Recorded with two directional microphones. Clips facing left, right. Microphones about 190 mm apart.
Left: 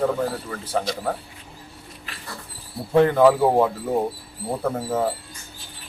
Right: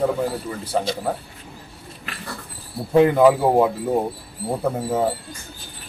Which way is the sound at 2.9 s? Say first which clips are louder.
Right 1 dB; 10° right (ahead or behind).